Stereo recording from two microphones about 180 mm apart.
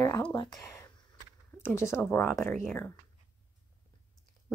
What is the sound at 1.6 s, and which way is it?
Speech, 15° left (ahead or behind).